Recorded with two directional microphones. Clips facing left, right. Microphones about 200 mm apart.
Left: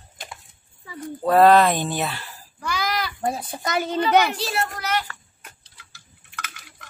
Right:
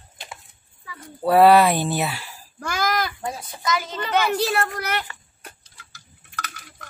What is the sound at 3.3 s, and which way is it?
Speech, 55° left (ahead or behind).